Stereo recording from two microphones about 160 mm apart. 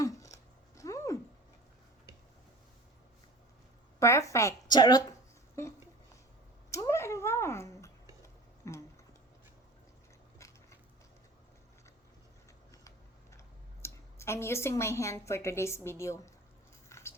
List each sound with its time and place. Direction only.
0.0 s a sound: 20° left (ahead or behind)
0.8 s cat: 20° left (ahead or behind)
4.0 s speech: 20° left (ahead or behind)
5.6 s a sound: 20° left (ahead or behind)
10.3 s biting: 20° left (ahead or behind)
13.8 s a woman's voice: 15° left (ahead or behind)
16.9 s biting: 15° left (ahead or behind)